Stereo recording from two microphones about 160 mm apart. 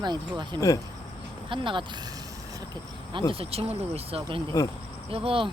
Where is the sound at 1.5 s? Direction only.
30° right (ahead or behind).